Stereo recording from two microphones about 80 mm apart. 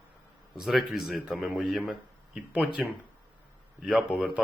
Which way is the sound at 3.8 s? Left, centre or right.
Centre.